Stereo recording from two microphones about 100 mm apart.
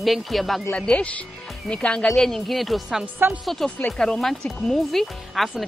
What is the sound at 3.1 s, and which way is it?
Speech, 20° right (ahead or behind).